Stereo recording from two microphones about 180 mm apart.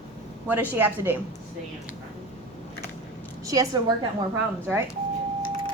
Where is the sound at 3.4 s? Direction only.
20° right (ahead or behind).